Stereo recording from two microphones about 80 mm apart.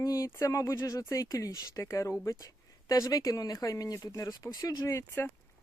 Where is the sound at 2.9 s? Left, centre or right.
Left.